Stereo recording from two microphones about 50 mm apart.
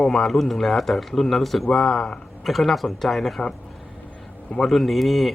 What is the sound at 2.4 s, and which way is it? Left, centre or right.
Speech, centre.